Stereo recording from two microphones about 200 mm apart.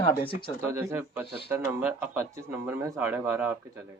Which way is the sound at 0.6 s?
15° right (ahead or behind).